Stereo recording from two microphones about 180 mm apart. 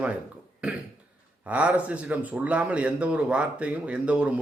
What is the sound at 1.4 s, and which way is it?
Speech, 5° right (ahead or behind).